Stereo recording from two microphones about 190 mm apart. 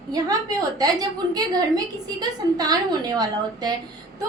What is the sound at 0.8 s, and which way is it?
A woman's voice, 20° right (ahead or behind).